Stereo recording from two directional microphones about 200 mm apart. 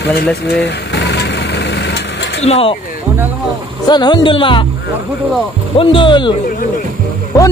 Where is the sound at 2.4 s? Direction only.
30° left (ahead or behind).